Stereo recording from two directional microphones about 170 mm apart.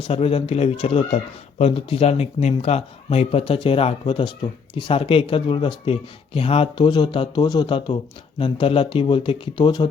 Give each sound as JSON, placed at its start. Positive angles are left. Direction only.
{"t": 0.0, "sound": "speech", "side_deg": 35}